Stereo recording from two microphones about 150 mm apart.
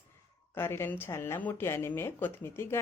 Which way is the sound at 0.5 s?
15° left (ahead or behind).